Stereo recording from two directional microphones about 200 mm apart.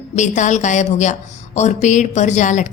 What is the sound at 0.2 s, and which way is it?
A woman's voice, 35° left (ahead or behind).